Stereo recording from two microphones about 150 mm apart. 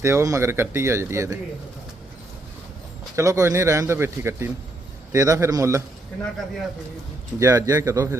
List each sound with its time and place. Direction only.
0.0 s speech: 20° right (ahead or behind)
3.2 s a man's voice: 20° right (ahead or behind)
7.3 s a man's voice: 20° right (ahead or behind)